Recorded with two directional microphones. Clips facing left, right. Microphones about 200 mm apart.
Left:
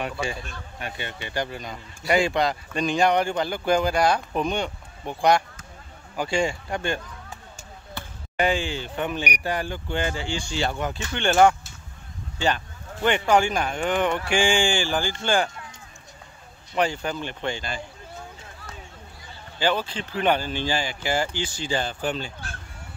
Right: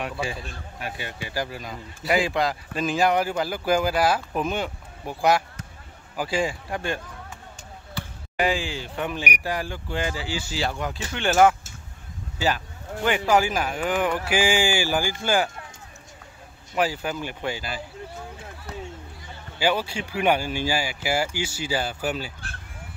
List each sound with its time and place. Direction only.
0.0 s speech: centre (ahead or behind)
8.4 s speech: centre (ahead or behind)
16.7 s speech: 5° right (ahead or behind)
19.6 s speech: 10° right (ahead or behind)